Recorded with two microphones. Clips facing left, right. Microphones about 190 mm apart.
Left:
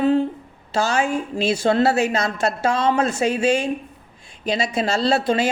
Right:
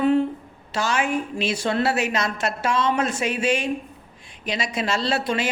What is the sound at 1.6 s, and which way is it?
Speech, 30° left (ahead or behind).